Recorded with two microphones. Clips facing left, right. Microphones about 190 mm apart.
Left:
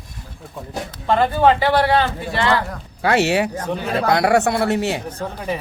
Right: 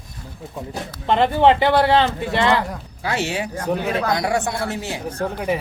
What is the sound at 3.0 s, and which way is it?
Speech, 70° left (ahead or behind).